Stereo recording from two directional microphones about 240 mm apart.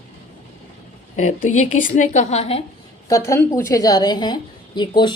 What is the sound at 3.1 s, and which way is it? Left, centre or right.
A woman's voice, centre.